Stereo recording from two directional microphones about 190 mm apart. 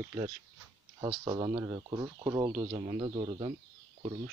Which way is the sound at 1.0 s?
25° right (ahead or behind).